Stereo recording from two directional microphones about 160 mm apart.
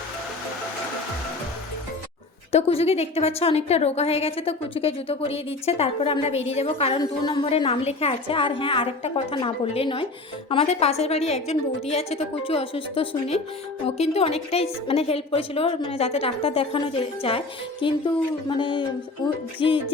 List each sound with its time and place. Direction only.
2.5 s a woman's voice: 40° left (ahead or behind)